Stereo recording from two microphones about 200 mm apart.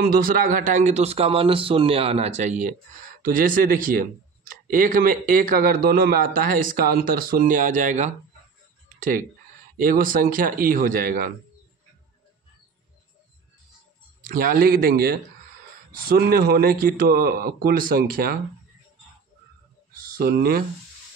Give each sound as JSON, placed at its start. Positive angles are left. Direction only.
{"t": 0.0, "sound": "a man's voice", "side_deg": -45}
{"t": 8.8, "sound": "a sound", "side_deg": -45}
{"t": 9.8, "sound": "a man's voice", "side_deg": -45}
{"t": 14.2, "sound": "a man's voice", "side_deg": -45}
{"t": 20.2, "sound": "a man's voice", "side_deg": -50}